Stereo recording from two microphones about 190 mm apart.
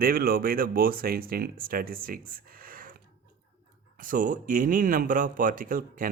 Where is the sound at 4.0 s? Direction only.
45° right (ahead or behind).